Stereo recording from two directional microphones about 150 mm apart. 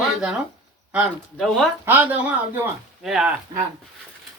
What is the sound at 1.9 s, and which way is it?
Speech, 10° right (ahead or behind).